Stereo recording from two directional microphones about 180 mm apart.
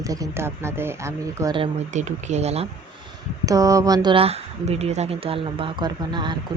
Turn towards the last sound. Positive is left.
turn(degrees=-25)  # may be behind; listen again after turning